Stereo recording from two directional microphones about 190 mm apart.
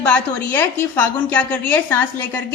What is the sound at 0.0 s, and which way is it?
A woman's voice, 10° left (ahead or behind).